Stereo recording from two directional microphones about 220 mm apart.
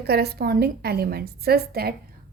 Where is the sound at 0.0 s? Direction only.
45° right (ahead or behind).